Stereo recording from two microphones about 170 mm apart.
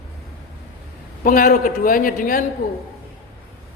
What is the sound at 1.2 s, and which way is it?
A man's voice, 55° left (ahead or behind).